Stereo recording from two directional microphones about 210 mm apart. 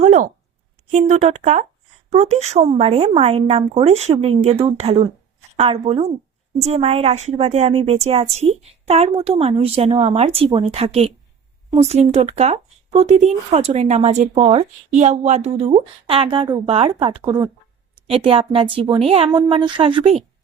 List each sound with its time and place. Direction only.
0.0 s a woman's voice: 35° right (ahead or behind)